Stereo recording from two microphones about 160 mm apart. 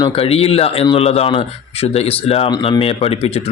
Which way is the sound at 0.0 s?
35° left (ahead or behind).